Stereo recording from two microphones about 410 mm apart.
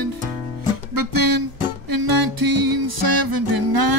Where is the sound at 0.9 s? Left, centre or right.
Right.